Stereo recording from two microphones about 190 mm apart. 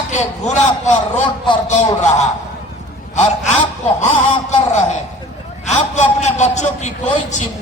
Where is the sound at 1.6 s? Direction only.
35° left (ahead or behind).